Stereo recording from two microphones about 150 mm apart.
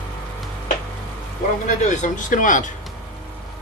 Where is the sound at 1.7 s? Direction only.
55° left (ahead or behind).